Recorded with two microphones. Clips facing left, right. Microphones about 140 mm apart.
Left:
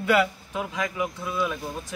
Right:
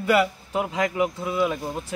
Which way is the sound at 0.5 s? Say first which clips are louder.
Right 5 dB; 30° right (ahead or behind).